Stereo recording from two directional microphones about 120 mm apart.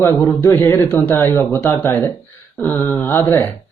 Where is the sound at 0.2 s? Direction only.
30° left (ahead or behind).